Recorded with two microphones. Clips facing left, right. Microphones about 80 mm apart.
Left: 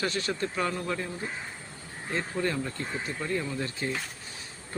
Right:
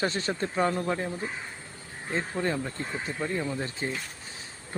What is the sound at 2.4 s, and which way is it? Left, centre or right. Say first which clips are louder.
Speech: right 1 dB; right.